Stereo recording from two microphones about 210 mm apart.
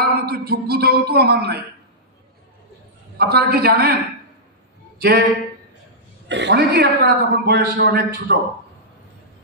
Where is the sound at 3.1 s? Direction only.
50° right (ahead or behind).